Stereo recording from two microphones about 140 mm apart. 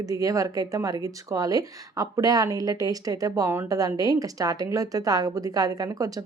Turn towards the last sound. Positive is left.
turn(degrees=-25)  # may be behind; listen again after turning